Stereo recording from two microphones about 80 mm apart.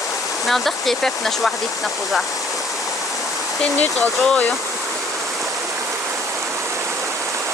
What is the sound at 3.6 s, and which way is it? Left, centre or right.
Speech, centre.